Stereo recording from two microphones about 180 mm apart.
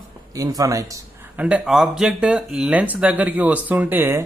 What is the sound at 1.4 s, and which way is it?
Speech, 5° right (ahead or behind).